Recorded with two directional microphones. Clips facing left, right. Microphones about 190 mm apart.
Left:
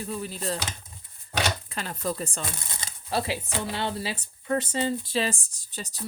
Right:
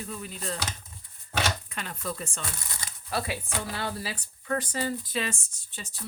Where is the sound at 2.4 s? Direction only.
20° left (ahead or behind).